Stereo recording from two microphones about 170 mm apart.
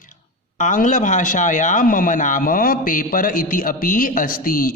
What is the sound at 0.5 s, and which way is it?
A man's voice, 50° left (ahead or behind).